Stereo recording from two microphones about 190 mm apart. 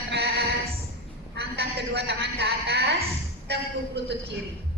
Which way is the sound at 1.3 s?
60° right (ahead or behind).